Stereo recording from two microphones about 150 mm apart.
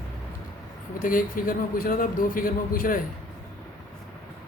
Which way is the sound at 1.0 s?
65° left (ahead or behind).